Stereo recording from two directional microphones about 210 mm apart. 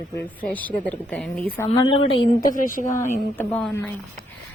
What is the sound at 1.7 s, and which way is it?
Speech, 25° left (ahead or behind).